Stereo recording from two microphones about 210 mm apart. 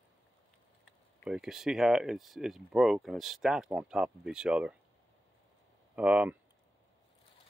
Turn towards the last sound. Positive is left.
turn(degrees=-5)  # may be behind; listen again after turning